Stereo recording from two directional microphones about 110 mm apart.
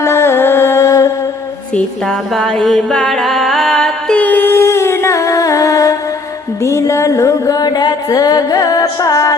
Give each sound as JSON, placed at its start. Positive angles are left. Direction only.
{"t": 0.0, "sound": "music", "side_deg": 25}
{"t": 1.7, "sound": "music", "side_deg": 5}
{"t": 4.2, "sound": "music", "side_deg": 15}